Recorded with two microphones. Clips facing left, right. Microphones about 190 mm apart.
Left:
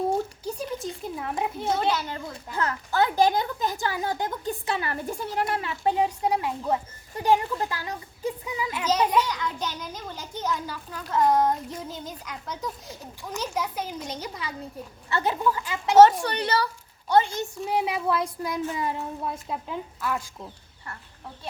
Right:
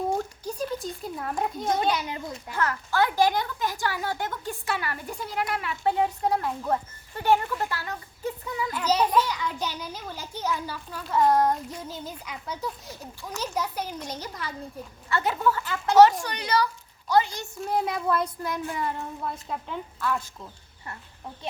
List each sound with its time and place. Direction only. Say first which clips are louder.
0.1 s a sound: left 2 dB; 5° left (ahead or behind)
1.7 s speech: even; 15° right (ahead or behind)
2.5 s speech: even; 20° left (ahead or behind)
6.0 s a woman's voice: even; 10° left (ahead or behind)
8.9 s a child's voice: even; 5° right (ahead or behind)
15.1 s a woman's voice: even; 20° left (ahead or behind)
16.0 s a woman's voice: left 2 dB; 30° left (ahead or behind)
17.6 s a woman's voice: even; 5° left (ahead or behind)